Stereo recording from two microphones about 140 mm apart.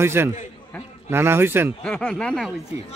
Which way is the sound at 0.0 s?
15° right (ahead or behind).